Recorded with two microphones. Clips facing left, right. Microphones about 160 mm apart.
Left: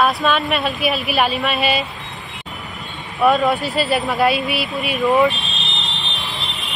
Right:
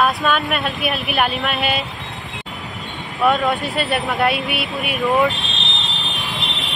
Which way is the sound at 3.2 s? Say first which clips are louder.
Left 2 dB; centre (ahead or behind).